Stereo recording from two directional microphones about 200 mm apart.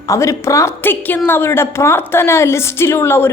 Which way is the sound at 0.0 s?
15° left (ahead or behind).